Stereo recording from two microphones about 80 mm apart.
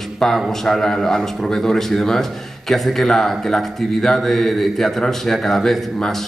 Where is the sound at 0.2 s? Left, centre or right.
Centre.